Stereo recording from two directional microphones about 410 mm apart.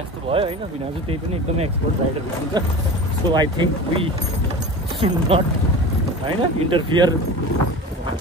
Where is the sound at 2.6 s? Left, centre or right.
Centre.